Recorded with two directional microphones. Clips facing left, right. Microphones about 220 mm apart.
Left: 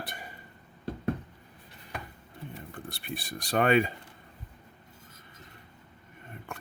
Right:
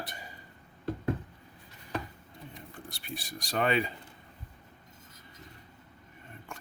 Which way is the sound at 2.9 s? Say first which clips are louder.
Left 3 dB; 60° left (ahead or behind).